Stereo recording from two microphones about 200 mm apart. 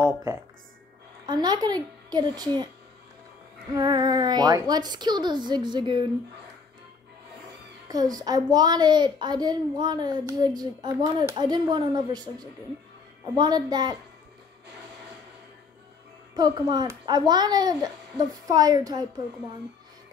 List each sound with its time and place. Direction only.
0.0 s a woman's voice: 15° right (ahead or behind)
3.7 s a woman's voice: 20° right (ahead or behind)
7.9 s a woman's voice: 20° right (ahead or behind)
16.3 s a woman's voice: 20° right (ahead or behind)